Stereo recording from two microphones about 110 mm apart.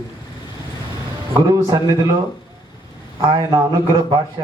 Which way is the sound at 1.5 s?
35° right (ahead or behind).